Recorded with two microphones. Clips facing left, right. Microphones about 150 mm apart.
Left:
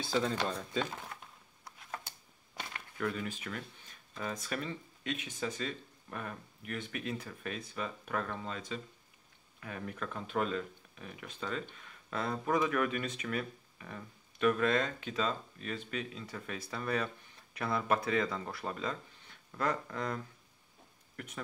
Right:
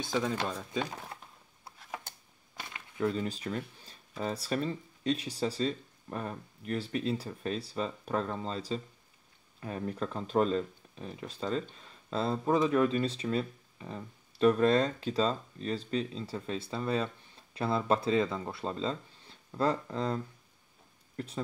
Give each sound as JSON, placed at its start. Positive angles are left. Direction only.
{"t": 0.0, "sound": "speech", "side_deg": -15}
{"t": 2.7, "sound": "a sound", "side_deg": -25}
{"t": 4.2, "sound": "speech", "side_deg": -30}
{"t": 21.2, "sound": "speech", "side_deg": -30}